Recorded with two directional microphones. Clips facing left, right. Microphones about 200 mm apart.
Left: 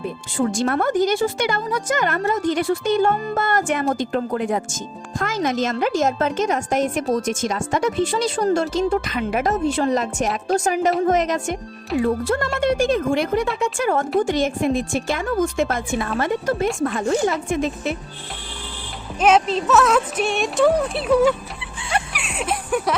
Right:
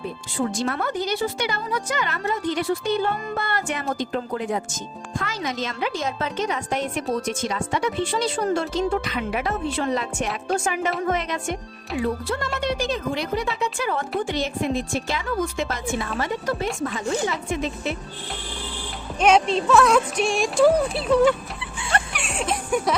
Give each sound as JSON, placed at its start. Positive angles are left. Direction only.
{"t": 0.3, "sound": "a woman's voice", "side_deg": 50}
{"t": 19.2, "sound": "speech", "side_deg": 0}
{"t": 21.9, "sound": "music", "side_deg": 5}